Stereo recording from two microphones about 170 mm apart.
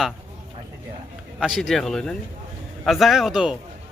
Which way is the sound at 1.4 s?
5° right (ahead or behind).